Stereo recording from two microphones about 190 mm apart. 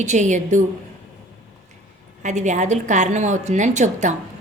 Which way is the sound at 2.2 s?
40° right (ahead or behind).